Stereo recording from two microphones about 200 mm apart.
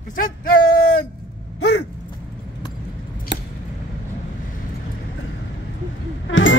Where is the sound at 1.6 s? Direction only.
60° left (ahead or behind).